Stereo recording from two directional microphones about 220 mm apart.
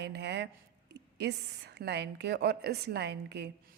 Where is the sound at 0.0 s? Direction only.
50° right (ahead or behind).